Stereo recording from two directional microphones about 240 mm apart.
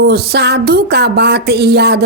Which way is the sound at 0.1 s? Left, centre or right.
Right.